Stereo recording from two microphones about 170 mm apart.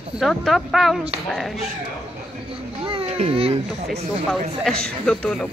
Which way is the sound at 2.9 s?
35° right (ahead or behind).